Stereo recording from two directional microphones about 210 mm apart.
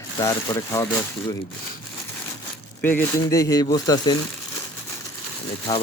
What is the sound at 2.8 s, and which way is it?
Speech, 10° left (ahead or behind).